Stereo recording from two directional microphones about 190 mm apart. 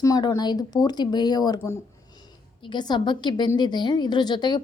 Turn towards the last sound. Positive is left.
turn(degrees=20)  # may be behind; listen again after turning